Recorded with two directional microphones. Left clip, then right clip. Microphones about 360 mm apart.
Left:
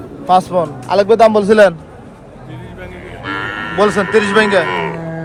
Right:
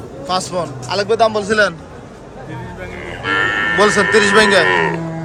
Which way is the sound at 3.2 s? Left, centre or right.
Right.